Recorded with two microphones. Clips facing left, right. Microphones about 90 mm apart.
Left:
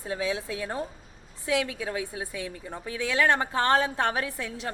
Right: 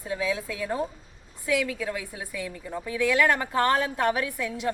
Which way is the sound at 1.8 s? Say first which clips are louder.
Even; 25° left (ahead or behind).